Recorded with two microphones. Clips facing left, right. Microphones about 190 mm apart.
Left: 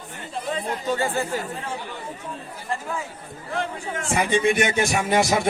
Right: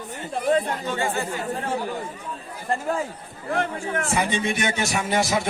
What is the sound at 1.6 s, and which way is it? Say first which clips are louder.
Speech: right 6 dB; 45° right (ahead or behind).